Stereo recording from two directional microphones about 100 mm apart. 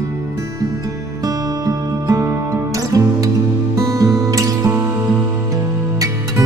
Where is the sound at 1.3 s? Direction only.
35° right (ahead or behind).